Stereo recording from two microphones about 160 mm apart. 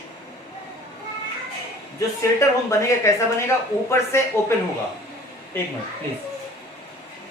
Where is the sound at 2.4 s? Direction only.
20° left (ahead or behind).